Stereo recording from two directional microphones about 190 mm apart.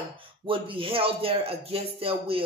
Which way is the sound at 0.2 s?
25° right (ahead or behind).